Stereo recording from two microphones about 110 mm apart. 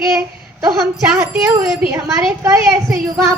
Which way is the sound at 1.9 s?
30° right (ahead or behind).